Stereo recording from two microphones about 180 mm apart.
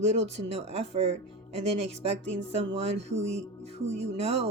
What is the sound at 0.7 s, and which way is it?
Speech, 35° right (ahead or behind).